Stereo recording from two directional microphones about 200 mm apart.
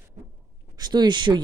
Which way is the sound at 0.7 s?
20° right (ahead or behind).